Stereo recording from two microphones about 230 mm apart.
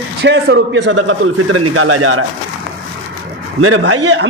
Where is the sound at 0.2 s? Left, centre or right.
Right.